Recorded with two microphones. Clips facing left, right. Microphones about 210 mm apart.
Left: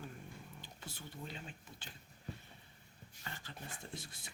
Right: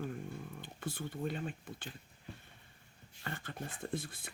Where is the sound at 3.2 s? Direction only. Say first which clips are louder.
Right 7 dB; 55° right (ahead or behind).